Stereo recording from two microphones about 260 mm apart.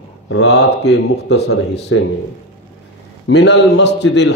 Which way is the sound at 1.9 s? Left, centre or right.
Left.